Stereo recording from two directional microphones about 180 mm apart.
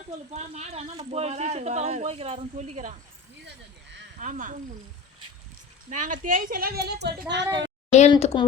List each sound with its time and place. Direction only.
0.3 s speech: 35° right (ahead or behind)
4.2 s a woman's voice: 45° right (ahead or behind)
5.9 s a woman's voice: 45° right (ahead or behind); by 7.4 s 70° right (ahead or behind)
7.9 s a woman's voice: 40° left (ahead or behind)